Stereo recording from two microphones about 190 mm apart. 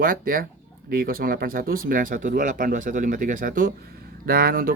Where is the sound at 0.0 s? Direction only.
50° right (ahead or behind).